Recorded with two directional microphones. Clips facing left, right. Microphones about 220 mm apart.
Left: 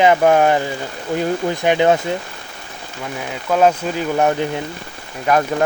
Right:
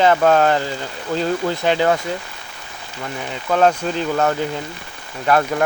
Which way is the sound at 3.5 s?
5° left (ahead or behind).